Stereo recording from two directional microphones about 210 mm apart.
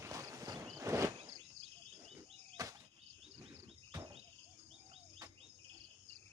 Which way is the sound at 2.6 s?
15° right (ahead or behind).